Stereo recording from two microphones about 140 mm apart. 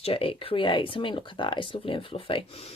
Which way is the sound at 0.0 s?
40° left (ahead or behind).